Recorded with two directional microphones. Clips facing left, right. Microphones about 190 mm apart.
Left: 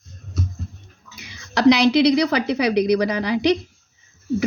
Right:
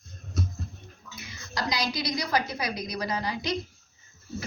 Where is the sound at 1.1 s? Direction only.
75° left (ahead or behind).